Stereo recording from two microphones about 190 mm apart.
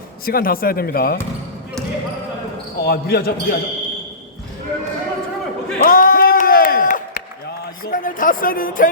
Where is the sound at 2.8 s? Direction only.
55° left (ahead or behind).